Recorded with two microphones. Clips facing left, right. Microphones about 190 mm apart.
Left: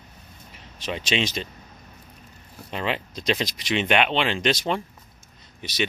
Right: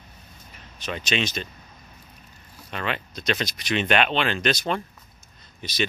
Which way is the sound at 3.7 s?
15° left (ahead or behind).